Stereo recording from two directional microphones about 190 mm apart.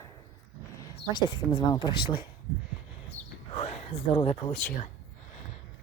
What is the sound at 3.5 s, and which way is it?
Speech, 35° left (ahead or behind).